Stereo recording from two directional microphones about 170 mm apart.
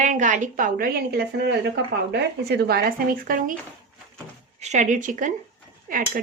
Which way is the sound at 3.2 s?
55° right (ahead or behind).